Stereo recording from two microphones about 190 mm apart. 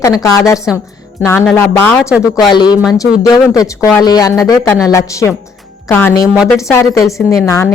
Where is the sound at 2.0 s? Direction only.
5° right (ahead or behind).